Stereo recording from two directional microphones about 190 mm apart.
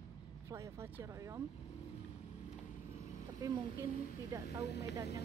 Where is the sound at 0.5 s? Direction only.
15° right (ahead or behind).